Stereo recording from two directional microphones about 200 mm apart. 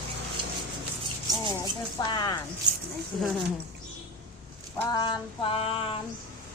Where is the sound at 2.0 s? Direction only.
20° left (ahead or behind).